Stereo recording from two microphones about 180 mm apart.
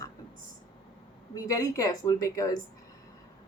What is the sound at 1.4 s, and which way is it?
Speech, 20° left (ahead or behind).